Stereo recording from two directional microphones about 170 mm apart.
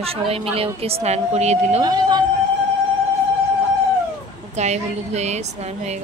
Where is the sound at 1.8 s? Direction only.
25° right (ahead or behind).